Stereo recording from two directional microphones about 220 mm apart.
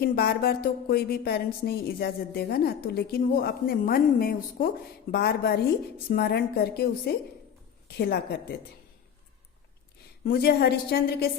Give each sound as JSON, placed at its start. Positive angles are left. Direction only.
{"t": 0.0, "sound": "a woman's voice", "side_deg": 45}
{"t": 7.9, "sound": "a woman's voice", "side_deg": 45}
{"t": 10.2, "sound": "a woman's voice", "side_deg": 45}